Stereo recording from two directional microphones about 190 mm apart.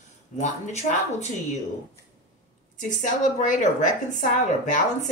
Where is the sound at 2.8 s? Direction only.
40° left (ahead or behind).